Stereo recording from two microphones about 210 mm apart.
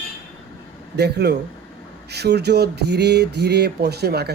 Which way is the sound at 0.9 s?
55° right (ahead or behind).